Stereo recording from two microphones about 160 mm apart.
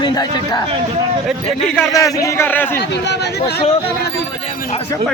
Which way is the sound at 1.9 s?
20° left (ahead or behind).